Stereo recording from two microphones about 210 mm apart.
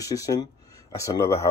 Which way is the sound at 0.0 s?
15° left (ahead or behind).